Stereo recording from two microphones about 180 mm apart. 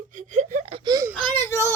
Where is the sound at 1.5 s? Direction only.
15° left (ahead or behind).